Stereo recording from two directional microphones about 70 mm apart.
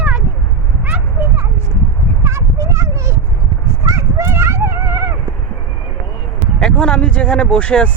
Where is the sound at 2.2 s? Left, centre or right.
Right.